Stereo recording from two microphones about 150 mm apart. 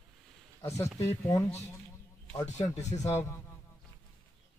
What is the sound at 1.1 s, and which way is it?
Speech, 20° left (ahead or behind).